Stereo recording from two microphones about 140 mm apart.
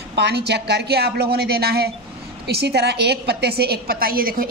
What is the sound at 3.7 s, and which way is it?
Speech, 90° right.